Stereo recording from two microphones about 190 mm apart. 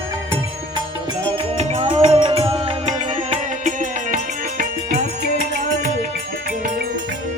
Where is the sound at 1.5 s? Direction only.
30° right (ahead or behind).